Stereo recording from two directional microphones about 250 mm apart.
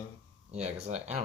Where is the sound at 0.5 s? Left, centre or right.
Right.